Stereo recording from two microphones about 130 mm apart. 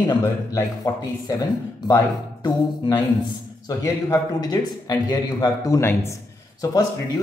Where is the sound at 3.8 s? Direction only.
30° left (ahead or behind).